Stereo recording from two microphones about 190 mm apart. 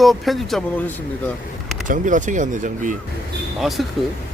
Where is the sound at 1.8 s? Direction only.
45° right (ahead or behind).